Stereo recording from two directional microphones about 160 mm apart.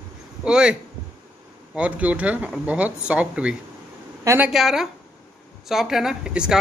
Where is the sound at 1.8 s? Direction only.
10° right (ahead or behind).